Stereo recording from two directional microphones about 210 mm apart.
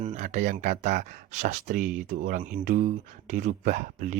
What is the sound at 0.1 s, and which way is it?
Speech, 35° right (ahead or behind).